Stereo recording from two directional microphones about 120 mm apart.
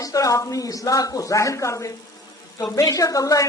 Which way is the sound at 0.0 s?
30° left (ahead or behind).